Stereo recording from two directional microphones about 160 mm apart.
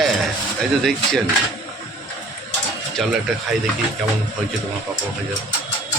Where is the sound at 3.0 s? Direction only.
Centre (ahead or behind).